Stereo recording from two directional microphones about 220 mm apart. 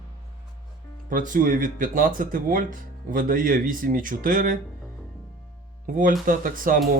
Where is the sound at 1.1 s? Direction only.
35° right (ahead or behind).